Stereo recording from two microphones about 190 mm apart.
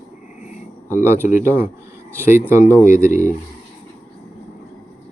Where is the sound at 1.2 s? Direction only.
45° left (ahead or behind).